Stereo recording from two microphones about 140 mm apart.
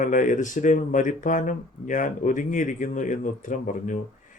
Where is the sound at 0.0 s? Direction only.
65° left (ahead or behind).